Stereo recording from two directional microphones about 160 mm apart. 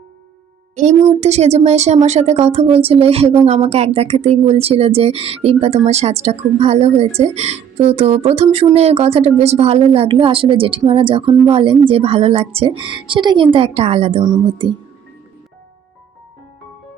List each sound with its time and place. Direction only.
0.8 s a woman's voice: 45° right (ahead or behind)